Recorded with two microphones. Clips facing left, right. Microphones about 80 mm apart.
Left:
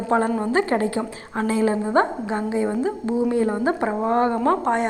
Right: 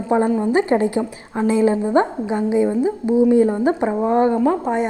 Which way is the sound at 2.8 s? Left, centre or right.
Centre.